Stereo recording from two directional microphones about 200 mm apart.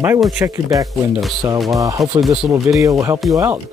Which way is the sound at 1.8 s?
15° right (ahead or behind).